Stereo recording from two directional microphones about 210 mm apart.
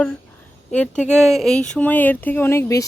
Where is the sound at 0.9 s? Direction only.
35° left (ahead or behind).